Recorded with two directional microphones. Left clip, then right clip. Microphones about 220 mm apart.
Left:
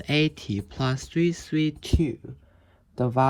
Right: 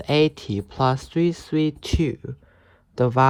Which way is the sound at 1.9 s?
40° left (ahead or behind).